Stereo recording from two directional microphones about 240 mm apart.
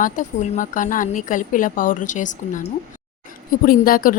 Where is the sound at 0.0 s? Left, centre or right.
Left.